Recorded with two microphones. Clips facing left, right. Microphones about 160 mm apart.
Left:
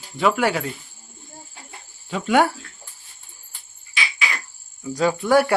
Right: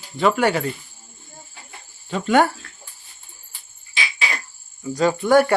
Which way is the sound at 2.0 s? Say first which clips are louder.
Right 1 dB; 5° left (ahead or behind).